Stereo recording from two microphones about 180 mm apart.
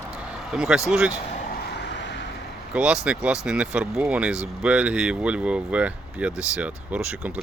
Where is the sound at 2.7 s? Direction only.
5° right (ahead or behind).